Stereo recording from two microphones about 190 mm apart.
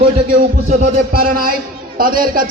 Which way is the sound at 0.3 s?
45° right (ahead or behind).